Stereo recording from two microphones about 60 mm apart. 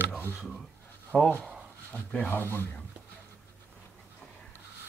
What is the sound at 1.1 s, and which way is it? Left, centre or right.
Speech, centre.